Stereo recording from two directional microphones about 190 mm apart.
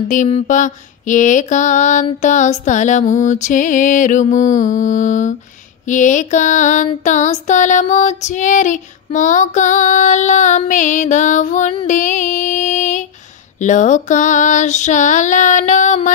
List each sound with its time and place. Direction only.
0.1 s female singing: 40° left (ahead or behind)